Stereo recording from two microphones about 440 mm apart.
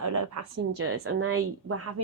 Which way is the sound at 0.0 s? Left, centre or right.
Right.